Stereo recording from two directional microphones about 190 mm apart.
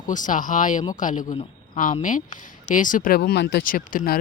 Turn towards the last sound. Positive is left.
turn(degrees=50)  # may be behind; listen again after turning